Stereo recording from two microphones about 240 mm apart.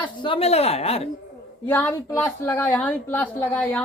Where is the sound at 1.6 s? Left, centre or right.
Centre.